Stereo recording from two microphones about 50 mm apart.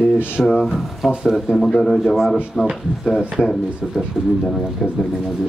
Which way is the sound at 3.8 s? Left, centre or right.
Centre.